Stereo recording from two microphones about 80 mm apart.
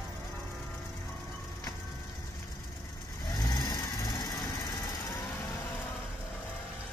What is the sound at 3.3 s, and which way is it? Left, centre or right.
Vehicle, left.